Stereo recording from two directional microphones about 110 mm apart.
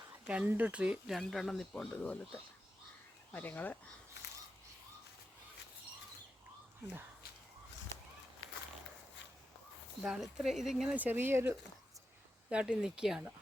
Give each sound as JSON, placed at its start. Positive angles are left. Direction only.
{"t": 0.3, "sound": "speech", "side_deg": -15}
{"t": 1.9, "sound": "speech", "side_deg": 15}
{"t": 10.0, "sound": "speech", "side_deg": -5}
{"t": 10.9, "sound": "speech", "side_deg": -15}
{"t": 12.5, "sound": "speech", "side_deg": -10}